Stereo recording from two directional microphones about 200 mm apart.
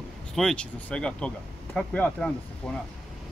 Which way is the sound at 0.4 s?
5° left (ahead or behind).